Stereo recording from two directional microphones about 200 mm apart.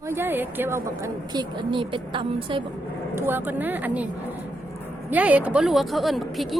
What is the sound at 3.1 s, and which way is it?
Speech, 10° right (ahead or behind).